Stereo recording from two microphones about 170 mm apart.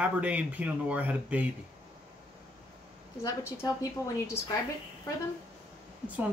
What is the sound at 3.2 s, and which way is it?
Speech, 20° left (ahead or behind).